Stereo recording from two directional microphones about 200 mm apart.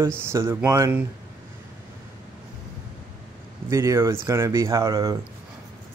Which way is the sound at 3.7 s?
15° right (ahead or behind).